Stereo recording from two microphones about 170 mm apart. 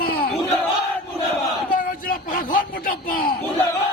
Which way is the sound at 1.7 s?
55° left (ahead or behind).